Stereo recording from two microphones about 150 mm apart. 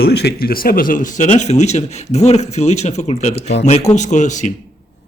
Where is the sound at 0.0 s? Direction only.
90° left; by 4.5 s 55° left (ahead or behind).